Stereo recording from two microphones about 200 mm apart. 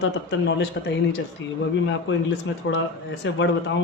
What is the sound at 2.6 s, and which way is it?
Speech, 70° left (ahead or behind).